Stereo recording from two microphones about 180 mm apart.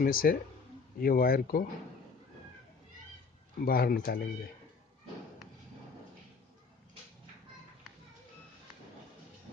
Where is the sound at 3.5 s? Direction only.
55° left (ahead or behind).